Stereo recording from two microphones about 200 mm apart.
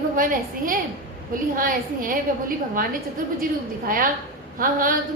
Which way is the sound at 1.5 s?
45° right (ahead or behind).